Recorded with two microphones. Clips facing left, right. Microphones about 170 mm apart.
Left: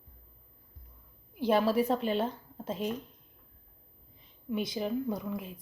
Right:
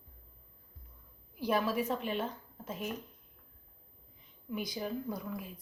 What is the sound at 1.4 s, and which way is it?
A woman's voice, 30° left (ahead or behind).